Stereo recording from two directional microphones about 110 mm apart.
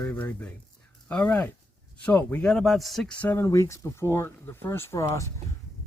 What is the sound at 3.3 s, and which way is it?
Speech, 25° left (ahead or behind).